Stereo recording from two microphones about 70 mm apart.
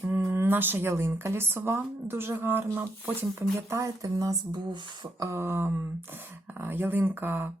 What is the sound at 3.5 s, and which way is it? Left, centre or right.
Speech, right.